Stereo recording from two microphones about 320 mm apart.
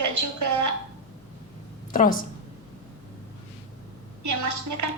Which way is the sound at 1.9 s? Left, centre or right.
Left.